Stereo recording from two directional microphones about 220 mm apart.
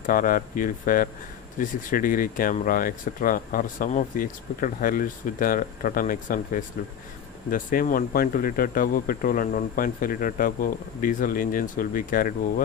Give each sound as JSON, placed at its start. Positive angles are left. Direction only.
{"t": 0.0, "sound": "speech", "side_deg": 40}